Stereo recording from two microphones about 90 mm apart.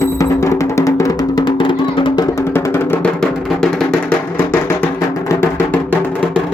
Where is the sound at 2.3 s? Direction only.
30° left (ahead or behind).